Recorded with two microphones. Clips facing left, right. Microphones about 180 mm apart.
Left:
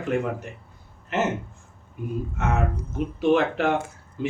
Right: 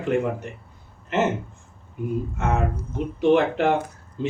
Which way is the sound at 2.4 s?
15° right (ahead or behind).